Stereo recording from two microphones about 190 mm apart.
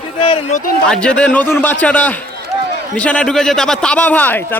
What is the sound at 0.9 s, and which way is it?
A man's voice, 5° left (ahead or behind).